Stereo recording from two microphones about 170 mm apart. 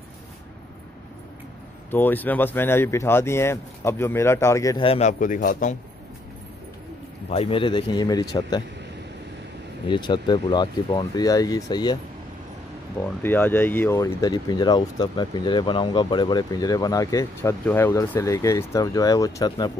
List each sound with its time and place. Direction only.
1.9 s speech: 10° left (ahead or behind)
4.8 s speech: 35° left (ahead or behind)
5.2 s a man's voice: 50° left (ahead or behind)
7.2 s speech: 35° left (ahead or behind)
9.8 s speech: 25° left (ahead or behind)
13.0 s speech: 10° left (ahead or behind)